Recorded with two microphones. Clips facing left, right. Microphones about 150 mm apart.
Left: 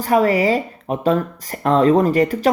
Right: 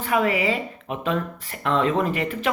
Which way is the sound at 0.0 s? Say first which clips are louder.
Left 6 dB; 40° left (ahead or behind).